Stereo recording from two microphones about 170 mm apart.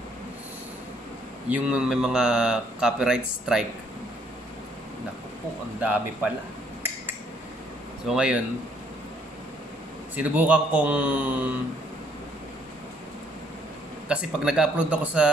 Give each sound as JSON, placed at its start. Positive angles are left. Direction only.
{"t": 1.5, "sound": "speech", "side_deg": -5}
{"t": 5.8, "sound": "speech", "side_deg": -10}
{"t": 8.1, "sound": "speech", "side_deg": -5}
{"t": 10.1, "sound": "speech", "side_deg": -10}
{"t": 14.0, "sound": "speech", "side_deg": -5}